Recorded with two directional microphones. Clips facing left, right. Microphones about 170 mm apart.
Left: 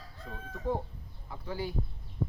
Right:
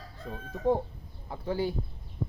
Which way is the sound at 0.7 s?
30° right (ahead or behind).